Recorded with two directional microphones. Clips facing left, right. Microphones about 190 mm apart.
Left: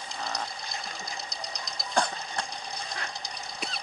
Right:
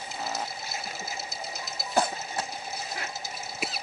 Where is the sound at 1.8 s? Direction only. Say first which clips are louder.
Right 2 dB; 5° right (ahead or behind).